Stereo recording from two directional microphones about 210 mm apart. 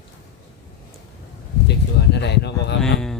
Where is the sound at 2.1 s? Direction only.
55° left (ahead or behind).